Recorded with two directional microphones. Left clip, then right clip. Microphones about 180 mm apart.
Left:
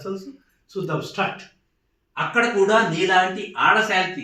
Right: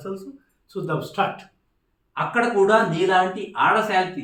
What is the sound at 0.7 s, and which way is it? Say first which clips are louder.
Speech: even; 25° right (ahead or behind).